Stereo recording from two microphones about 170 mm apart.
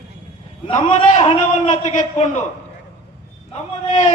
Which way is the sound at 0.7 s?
40° left (ahead or behind).